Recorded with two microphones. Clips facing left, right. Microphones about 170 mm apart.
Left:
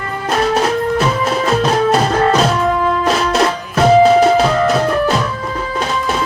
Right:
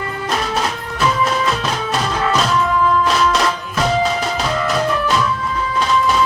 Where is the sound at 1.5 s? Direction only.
40° left (ahead or behind).